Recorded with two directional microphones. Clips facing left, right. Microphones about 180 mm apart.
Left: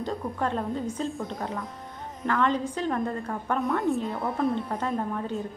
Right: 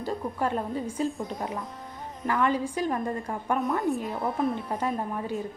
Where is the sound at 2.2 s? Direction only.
10° right (ahead or behind).